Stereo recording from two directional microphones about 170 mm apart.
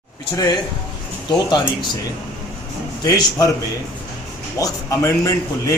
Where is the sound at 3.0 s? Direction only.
20° left (ahead or behind).